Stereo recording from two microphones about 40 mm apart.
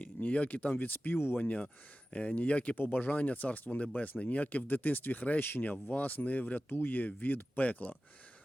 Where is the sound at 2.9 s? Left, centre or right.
Left.